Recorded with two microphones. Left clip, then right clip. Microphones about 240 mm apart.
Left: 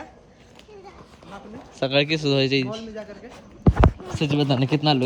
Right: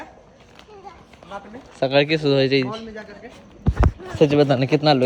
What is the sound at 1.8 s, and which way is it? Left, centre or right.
Speech, centre.